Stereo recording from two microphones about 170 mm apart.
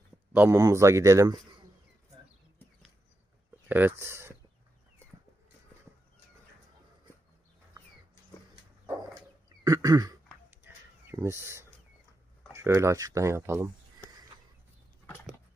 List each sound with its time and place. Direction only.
0.3 s speech: 15° right (ahead or behind)
3.7 s speech: 10° right (ahead or behind)
9.6 s throat clearing: 20° right (ahead or behind)
10.6 s a sound: 15° right (ahead or behind)
12.5 s speech: 15° right (ahead or behind)